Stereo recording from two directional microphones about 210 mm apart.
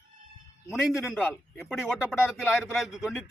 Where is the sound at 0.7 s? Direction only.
Centre (ahead or behind).